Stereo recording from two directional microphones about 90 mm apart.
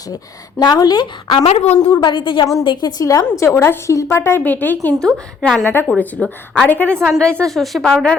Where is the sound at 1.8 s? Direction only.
60° left (ahead or behind); by 4.9 s 20° left (ahead or behind).